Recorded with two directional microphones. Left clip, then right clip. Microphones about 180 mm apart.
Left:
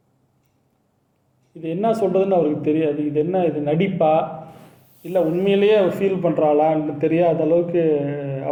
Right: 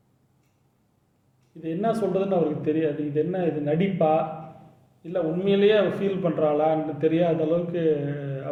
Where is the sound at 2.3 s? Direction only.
15° left (ahead or behind).